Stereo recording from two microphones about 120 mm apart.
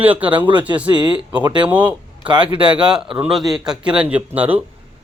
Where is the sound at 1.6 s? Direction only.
15° right (ahead or behind).